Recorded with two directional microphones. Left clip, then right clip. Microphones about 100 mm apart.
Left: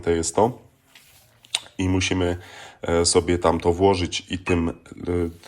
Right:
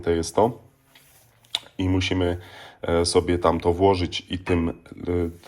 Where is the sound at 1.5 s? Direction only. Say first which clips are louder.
Left 1 dB; 40° left (ahead or behind).